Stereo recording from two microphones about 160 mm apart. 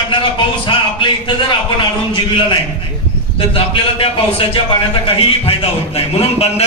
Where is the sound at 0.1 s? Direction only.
30° left (ahead or behind).